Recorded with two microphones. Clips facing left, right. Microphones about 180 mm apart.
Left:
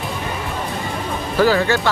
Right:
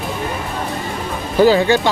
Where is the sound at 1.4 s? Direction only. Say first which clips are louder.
Right 4 dB; 20° right (ahead or behind).